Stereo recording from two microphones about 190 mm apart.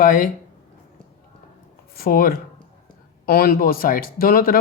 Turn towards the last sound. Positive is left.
turn(degrees=50)  # may be behind; listen again after turning